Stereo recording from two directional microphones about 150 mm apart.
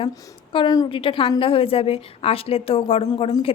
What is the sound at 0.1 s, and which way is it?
A woman's voice, 30° left (ahead or behind).